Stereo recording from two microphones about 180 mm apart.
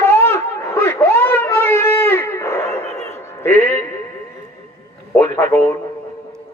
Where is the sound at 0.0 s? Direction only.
15° left (ahead or behind).